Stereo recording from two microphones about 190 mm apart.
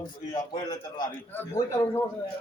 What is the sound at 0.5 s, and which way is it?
A man's voice, 20° left (ahead or behind).